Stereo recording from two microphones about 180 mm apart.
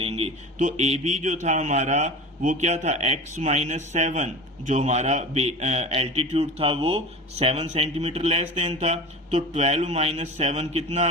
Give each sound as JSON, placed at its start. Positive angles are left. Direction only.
{"t": 0.0, "sound": "speech", "side_deg": -35}